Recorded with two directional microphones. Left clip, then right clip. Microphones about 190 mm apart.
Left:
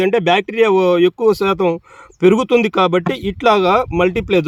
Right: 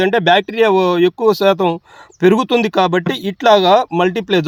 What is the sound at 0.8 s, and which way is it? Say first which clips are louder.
Speech: even; 35° right (ahead or behind).